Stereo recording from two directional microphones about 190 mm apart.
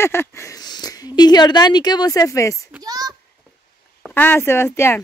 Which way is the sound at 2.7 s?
20° right (ahead or behind).